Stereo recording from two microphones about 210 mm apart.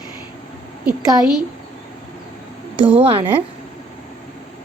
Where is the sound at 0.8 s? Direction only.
5° right (ahead or behind).